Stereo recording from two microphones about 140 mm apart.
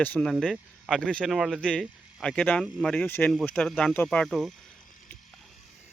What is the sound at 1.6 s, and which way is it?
Speech, 5° left (ahead or behind).